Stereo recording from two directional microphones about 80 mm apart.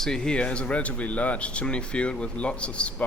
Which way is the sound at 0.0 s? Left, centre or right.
Centre.